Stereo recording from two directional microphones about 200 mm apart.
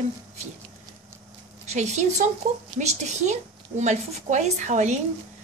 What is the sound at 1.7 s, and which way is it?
Speech, 35° right (ahead or behind).